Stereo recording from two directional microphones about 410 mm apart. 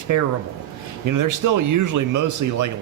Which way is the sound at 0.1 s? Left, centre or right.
Right.